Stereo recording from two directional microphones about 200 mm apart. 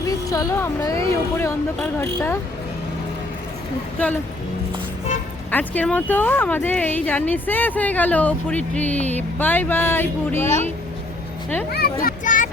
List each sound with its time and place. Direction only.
0.1 s speech: 15° left (ahead or behind)
3.9 s speech: 10° left (ahead or behind)
5.5 s speech: 10° left (ahead or behind)
12.0 s a child's voice: 40° left (ahead or behind)